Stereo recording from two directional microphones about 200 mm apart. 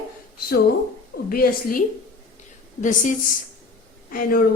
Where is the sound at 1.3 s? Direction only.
45° left (ahead or behind).